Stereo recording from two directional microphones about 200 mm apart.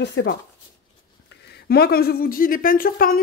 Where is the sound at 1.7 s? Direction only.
50° left (ahead or behind).